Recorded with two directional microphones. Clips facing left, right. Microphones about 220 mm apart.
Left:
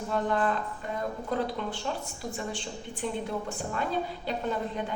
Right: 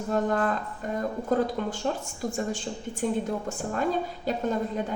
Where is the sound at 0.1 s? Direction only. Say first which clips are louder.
Right 2 dB; 45° right (ahead or behind).